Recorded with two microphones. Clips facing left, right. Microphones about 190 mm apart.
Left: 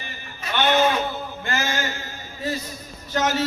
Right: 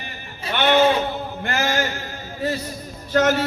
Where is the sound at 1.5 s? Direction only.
60° right (ahead or behind).